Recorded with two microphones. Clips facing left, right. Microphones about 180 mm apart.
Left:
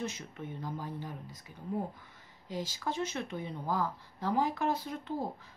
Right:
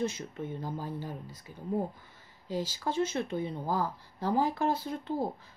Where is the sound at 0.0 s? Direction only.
30° right (ahead or behind).